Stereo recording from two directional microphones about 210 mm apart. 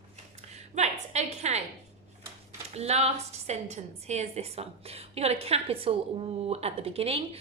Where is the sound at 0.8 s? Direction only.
35° right (ahead or behind).